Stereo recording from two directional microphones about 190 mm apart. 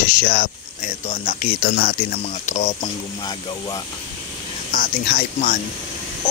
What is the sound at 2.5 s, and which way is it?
Speech, 35° left (ahead or behind).